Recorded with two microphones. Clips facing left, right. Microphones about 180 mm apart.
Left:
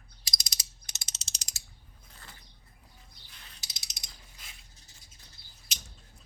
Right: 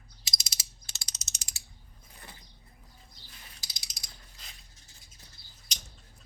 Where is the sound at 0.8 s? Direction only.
20° left (ahead or behind); by 1.6 s 35° left (ahead or behind).